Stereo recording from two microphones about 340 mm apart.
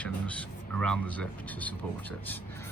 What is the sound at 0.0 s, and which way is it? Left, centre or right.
Speech, centre.